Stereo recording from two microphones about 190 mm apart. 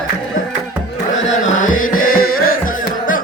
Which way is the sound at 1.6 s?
90° left.